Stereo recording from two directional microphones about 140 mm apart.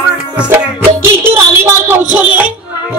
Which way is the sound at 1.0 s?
15° right (ahead or behind).